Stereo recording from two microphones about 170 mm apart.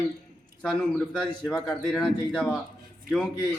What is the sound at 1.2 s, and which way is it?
Speech, 25° left (ahead or behind).